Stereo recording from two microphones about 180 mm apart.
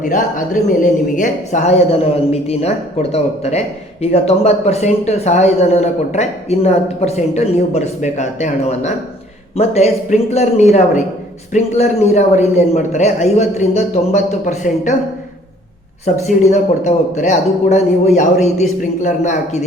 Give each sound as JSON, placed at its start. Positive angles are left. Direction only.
{"t": 0.0, "sound": "speech", "side_deg": 45}
{"t": 16.0, "sound": "speech", "side_deg": 40}